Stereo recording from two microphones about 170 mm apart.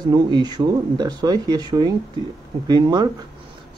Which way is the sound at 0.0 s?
25° right (ahead or behind).